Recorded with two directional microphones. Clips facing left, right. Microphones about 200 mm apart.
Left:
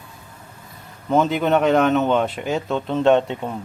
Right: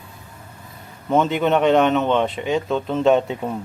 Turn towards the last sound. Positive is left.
turn(degrees=-5)  # may be behind; listen again after turning